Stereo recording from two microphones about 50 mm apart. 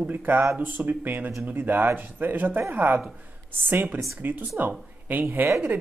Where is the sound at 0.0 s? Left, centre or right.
Right.